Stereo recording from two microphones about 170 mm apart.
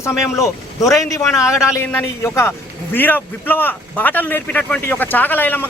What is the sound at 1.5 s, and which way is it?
A man's voice, 15° left (ahead or behind).